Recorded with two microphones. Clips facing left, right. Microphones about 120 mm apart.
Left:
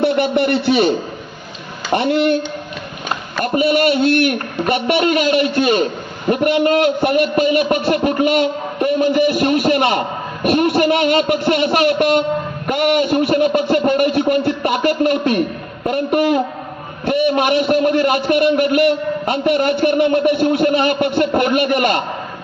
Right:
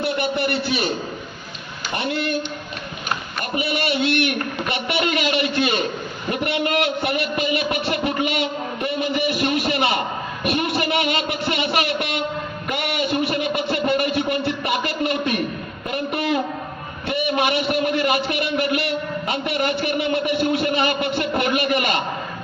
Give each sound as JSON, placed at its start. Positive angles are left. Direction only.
{"t": 0.0, "sound": "a man's voice", "side_deg": 65}
{"t": 3.5, "sound": "a man's voice", "side_deg": 45}